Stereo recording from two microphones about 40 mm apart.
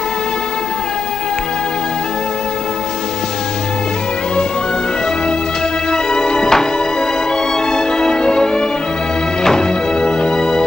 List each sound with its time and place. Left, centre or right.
5.9 s music: centre
7.7 s music: centre